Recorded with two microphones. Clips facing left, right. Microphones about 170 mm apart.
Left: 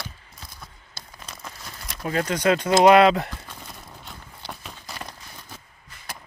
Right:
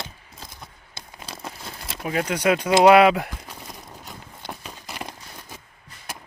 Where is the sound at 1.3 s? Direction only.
30° right (ahead or behind).